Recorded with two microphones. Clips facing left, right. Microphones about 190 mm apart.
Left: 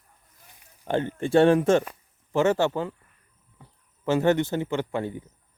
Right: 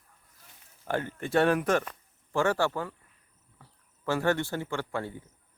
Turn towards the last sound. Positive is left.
turn(degrees=20)  # may be behind; listen again after turning